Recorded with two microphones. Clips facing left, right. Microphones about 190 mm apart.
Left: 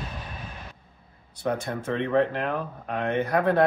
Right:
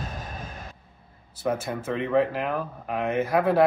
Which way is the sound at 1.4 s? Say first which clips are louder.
Even; 5° right (ahead or behind).